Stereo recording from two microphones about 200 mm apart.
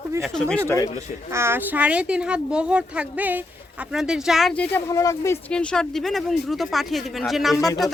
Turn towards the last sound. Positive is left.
turn(degrees=15)  # may be behind; listen again after turning